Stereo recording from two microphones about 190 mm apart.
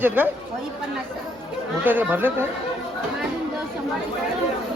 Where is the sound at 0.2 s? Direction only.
10° right (ahead or behind).